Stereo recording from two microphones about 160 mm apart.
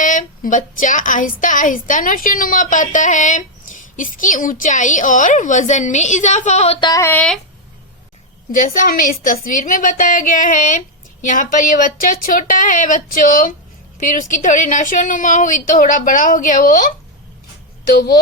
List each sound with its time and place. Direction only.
0.0 s a woman's voice: 55° left (ahead or behind)
6.8 s a sound: 20° left (ahead or behind)
7.1 s speech: 10° left (ahead or behind)
8.5 s speech: 55° left (ahead or behind)
17.9 s speech: 85° left